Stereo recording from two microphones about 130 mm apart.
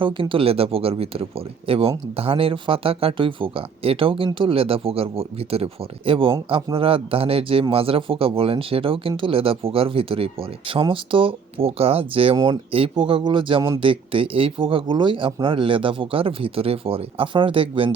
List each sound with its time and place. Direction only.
0.0 s speech: 40° right (ahead or behind)